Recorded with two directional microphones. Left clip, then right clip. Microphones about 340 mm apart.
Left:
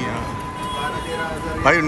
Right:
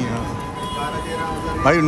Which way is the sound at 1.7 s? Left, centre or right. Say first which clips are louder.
Left 1 dB; centre.